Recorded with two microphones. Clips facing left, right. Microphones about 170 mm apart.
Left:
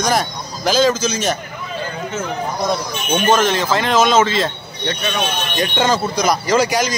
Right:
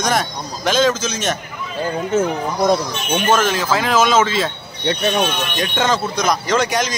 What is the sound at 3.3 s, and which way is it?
Speech, 5° right (ahead or behind).